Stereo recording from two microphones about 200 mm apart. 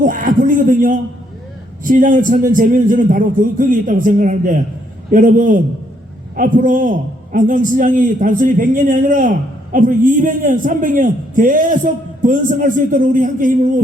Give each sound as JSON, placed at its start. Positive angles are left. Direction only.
{"t": 0.0, "sound": "a man's voice", "side_deg": -45}